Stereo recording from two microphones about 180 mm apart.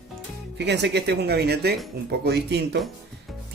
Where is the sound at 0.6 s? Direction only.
70° right (ahead or behind).